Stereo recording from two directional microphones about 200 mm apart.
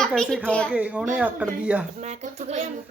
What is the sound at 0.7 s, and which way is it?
A child's voice, 5° right (ahead or behind).